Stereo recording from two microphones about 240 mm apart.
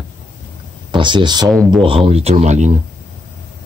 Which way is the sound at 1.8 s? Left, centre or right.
Right.